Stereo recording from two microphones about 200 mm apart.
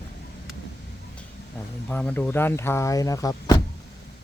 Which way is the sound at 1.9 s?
10° left (ahead or behind).